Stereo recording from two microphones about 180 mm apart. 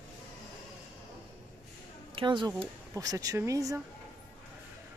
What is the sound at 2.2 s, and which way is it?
Speech, 25° right (ahead or behind).